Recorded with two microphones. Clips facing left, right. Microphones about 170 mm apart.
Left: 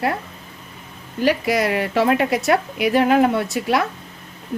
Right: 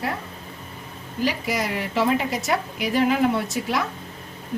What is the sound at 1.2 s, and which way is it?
A woman's voice, 65° left (ahead or behind).